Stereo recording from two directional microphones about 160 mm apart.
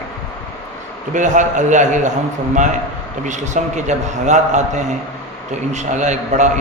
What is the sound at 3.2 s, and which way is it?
A man's voice, 50° right (ahead or behind).